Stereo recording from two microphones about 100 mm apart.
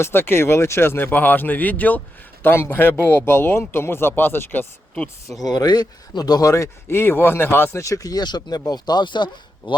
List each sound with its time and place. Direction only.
0.0 s speech: 25° left (ahead or behind)
5.4 s speech: 40° left (ahead or behind)